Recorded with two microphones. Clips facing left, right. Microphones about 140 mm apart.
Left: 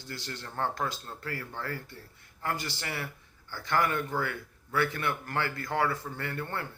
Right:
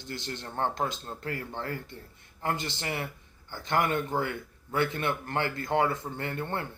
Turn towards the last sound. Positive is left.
turn(degrees=-25)  # may be behind; listen again after turning